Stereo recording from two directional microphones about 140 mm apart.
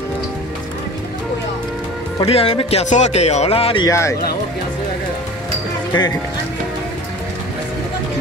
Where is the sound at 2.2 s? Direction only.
45° left (ahead or behind).